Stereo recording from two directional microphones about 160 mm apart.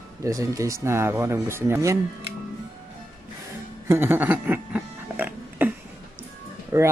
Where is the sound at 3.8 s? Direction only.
15° right (ahead or behind).